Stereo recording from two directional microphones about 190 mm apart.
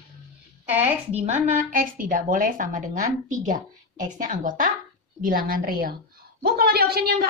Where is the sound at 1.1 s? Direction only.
45° right (ahead or behind).